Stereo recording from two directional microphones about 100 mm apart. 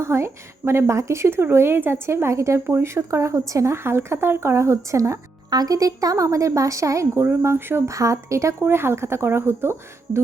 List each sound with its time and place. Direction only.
0.0 s a woman's voice: 25° right (ahead or behind)